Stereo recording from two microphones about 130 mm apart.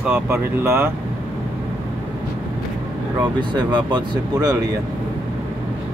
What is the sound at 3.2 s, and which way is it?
Speech, 35° right (ahead or behind).